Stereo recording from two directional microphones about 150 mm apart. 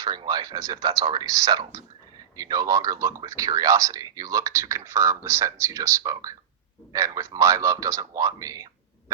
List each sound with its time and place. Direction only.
0.0 s speech: 25° right (ahead or behind)
6.9 s speech: 20° right (ahead or behind)